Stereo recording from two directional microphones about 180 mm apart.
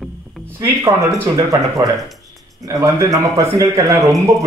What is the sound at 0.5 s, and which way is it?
A man's voice, 20° right (ahead or behind).